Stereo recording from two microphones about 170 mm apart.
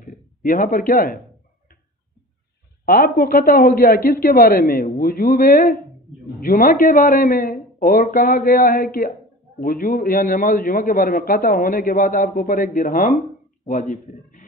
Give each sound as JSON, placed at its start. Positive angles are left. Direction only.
{"t": 0.0, "sound": "speech", "side_deg": 55}
{"t": 2.8, "sound": "a man's voice", "side_deg": 60}